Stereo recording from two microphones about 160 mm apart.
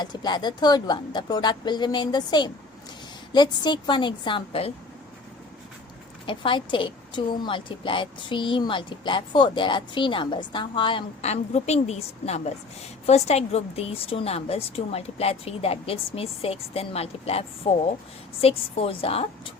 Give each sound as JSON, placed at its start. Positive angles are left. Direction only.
{"t": 0.0, "sound": "a woman's voice", "side_deg": 25}
{"t": 6.2, "sound": "a woman's voice", "side_deg": 30}